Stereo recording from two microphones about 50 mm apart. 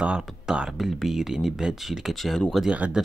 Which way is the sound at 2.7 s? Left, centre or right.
Right.